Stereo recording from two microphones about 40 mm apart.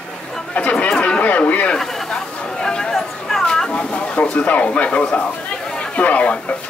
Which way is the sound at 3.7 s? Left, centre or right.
Left.